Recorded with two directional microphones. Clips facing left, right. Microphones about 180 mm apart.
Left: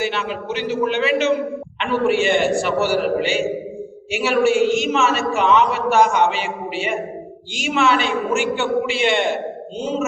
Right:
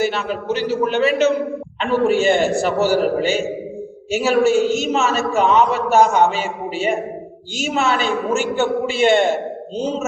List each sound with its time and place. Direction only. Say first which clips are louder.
0.0 s a man's voice: right 3 dB; 40° right (ahead or behind)